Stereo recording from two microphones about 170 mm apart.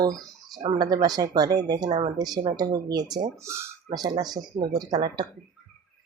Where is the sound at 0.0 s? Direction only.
20° right (ahead or behind).